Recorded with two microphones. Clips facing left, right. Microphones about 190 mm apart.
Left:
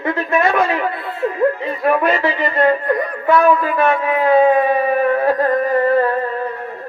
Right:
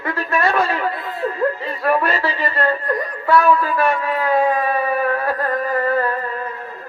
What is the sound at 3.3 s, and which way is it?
Speech, 20° left (ahead or behind).